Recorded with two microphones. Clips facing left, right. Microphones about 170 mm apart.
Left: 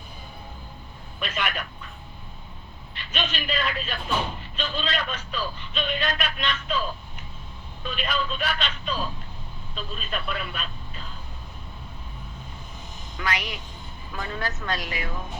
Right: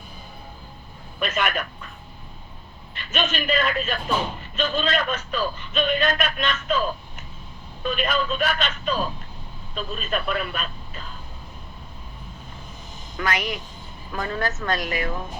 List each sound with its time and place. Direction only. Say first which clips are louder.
1.2 s speech: right 5 dB; 50° right (ahead or behind)
2.9 s a man's voice: right 5 dB; 50° right (ahead or behind)
13.1 s speech: right 4 dB; 50° right (ahead or behind)